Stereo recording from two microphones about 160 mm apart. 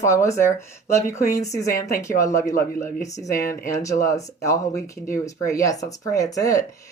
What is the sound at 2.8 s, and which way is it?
Speech, 55° left (ahead or behind).